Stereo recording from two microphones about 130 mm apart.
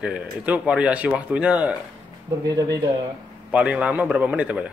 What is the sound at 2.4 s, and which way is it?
Speech, 30° right (ahead or behind).